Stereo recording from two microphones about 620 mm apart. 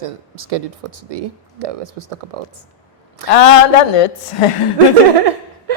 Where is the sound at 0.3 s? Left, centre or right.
Right.